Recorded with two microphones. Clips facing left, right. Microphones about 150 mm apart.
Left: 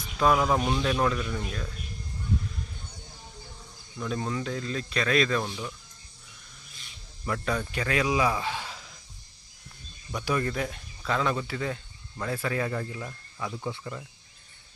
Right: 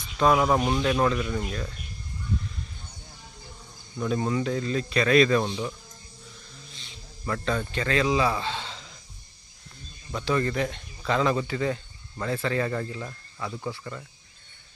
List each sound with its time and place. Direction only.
0.2 s speech: centre (ahead or behind)
0.4 s speech: 10° right (ahead or behind)
3.9 s speech: 5° right (ahead or behind)
5.4 s speech: 20° right (ahead or behind)
7.3 s a man's voice: 10° left (ahead or behind)
10.2 s speech: 10° left (ahead or behind)
13.7 s a man's voice: 15° left (ahead or behind)